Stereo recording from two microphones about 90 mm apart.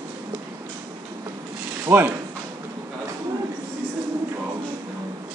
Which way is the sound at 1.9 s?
25° right (ahead or behind).